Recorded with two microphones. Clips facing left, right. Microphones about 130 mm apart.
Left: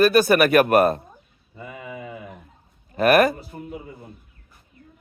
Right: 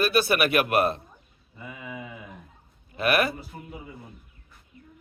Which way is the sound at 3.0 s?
45° left (ahead or behind).